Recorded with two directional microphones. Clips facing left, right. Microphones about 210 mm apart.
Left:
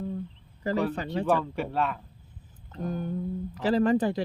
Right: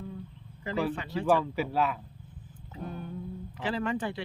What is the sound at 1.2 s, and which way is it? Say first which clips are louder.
Speech: right 1 dB; 5° right (ahead or behind).